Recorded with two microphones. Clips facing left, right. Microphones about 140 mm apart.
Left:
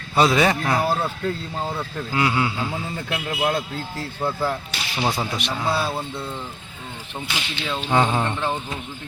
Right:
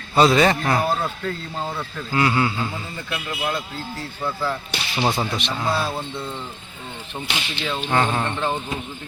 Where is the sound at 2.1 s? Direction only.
10° left (ahead or behind).